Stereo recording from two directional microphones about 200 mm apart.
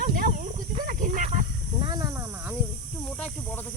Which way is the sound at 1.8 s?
20° right (ahead or behind).